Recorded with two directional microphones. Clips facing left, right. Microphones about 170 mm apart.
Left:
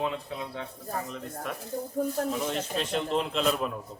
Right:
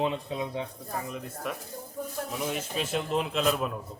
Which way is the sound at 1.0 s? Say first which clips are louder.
Right 1 dB; 5° right (ahead or behind).